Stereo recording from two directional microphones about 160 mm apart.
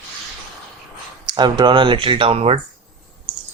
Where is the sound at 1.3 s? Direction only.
25° right (ahead or behind).